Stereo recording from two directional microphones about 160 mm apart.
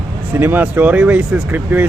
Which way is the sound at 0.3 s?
10° right (ahead or behind).